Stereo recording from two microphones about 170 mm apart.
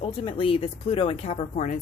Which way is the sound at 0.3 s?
30° left (ahead or behind).